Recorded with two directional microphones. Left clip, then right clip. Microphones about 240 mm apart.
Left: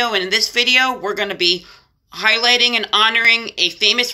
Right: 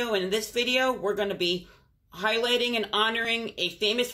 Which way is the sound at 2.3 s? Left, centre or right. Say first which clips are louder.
Left 11 dB; left.